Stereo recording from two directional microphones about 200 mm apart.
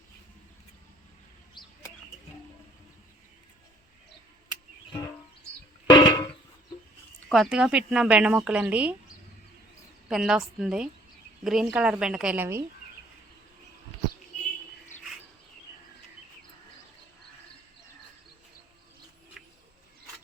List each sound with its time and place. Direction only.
1.6 s a sound: 20° left (ahead or behind)
4.9 s music: 20° left (ahead or behind)
5.9 s a sound: 20° left (ahead or behind)
7.3 s speech: centre (ahead or behind)
10.1 s speech: centre (ahead or behind)
19.4 s bird: centre (ahead or behind)